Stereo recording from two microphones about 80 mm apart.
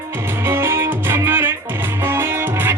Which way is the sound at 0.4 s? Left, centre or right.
Right.